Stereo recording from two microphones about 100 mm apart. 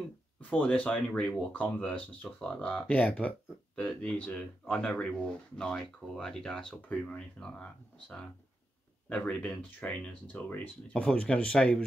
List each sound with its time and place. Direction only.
0.4 s speech: 15° left (ahead or behind)
9.1 s speech: 10° left (ahead or behind)